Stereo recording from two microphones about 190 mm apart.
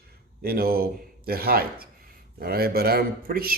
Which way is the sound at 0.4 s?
55° right (ahead or behind).